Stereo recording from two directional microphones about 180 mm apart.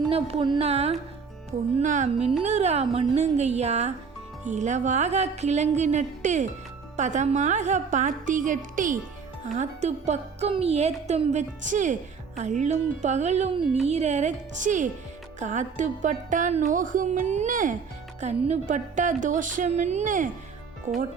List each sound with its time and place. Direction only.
0.1 s speech: 30° right (ahead or behind)
1.8 s music: 45° right (ahead or behind)
2.4 s speech: 40° right (ahead or behind)
6.9 s music: 40° right (ahead or behind)
9.6 s speech: 40° right (ahead or behind)
15.4 s music: 45° right (ahead or behind)
20.9 s speech: 40° right (ahead or behind)